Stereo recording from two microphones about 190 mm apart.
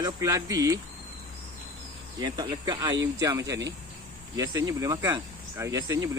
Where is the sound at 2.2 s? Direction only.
20° right (ahead or behind).